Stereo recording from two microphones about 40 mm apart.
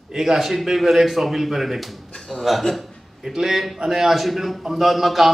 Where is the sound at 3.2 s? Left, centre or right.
Centre.